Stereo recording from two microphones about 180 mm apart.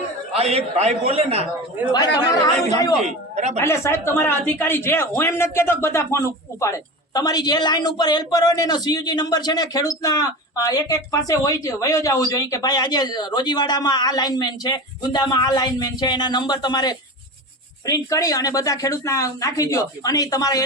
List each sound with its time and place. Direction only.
0.3 s a man's voice: 35° right (ahead or behind)
3.3 s a woman's voice: 40° right (ahead or behind)
3.6 s speech: 15° left (ahead or behind)